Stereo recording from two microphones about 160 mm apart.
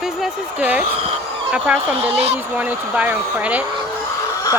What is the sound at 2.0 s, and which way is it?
Speech, 40° right (ahead or behind).